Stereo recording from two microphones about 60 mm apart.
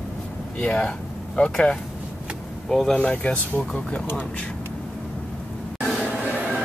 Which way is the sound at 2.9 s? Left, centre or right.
Centre.